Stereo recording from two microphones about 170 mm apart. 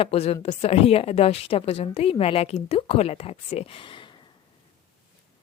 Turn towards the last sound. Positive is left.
turn(degrees=30)  # may be behind; listen again after turning